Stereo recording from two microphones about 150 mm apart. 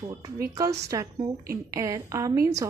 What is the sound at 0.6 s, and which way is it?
A woman's voice, 20° right (ahead or behind).